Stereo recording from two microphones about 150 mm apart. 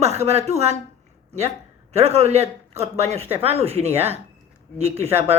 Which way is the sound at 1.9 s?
45° right (ahead or behind).